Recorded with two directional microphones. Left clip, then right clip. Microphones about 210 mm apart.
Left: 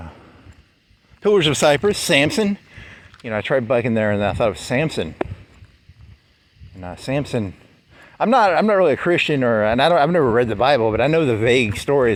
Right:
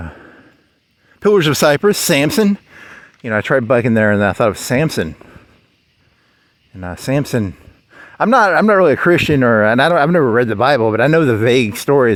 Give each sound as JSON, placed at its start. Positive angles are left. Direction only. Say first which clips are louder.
{"t": 0.0, "sound": "a sound", "louder": "right 7 dB", "side_deg": -65}
{"t": 1.2, "sound": "speech", "louder": "right 4 dB", "side_deg": -55}
{"t": 6.7, "sound": "speech", "louder": "right 5 dB", "side_deg": -60}